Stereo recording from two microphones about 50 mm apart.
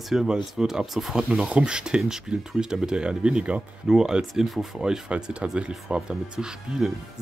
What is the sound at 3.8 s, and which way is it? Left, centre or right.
Speech, centre.